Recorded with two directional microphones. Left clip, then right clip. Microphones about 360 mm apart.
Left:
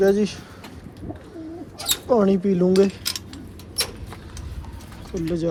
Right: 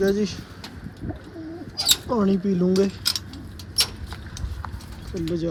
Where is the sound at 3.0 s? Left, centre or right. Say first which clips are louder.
Right 3 dB; right.